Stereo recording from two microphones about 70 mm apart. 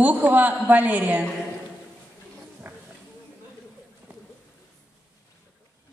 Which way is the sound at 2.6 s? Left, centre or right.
Right.